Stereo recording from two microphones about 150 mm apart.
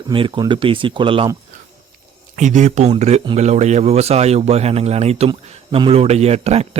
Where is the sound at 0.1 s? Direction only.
30° right (ahead or behind).